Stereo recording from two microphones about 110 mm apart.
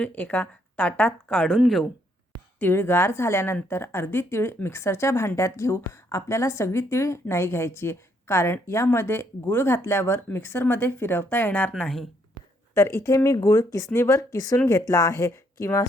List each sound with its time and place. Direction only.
0.0 s speech: 10° left (ahead or behind)
2.6 s a woman's voice: 20° left (ahead or behind)
11.8 s a woman's voice: 5° left (ahead or behind)
12.7 s a woman's voice: 25° left (ahead or behind)